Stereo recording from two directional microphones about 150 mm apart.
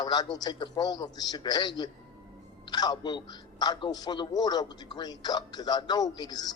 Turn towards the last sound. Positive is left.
turn(degrees=25)  # may be behind; listen again after turning